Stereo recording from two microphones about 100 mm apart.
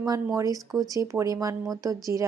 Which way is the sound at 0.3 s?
35° right (ahead or behind).